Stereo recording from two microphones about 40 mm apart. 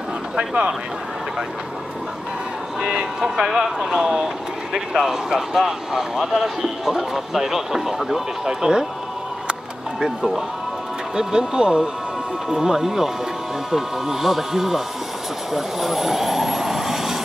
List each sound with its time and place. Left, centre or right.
0.4 s speech: centre
2.8 s speech: centre
9.5 s music: centre
11.1 s speech: right
15.5 s vehicle: centre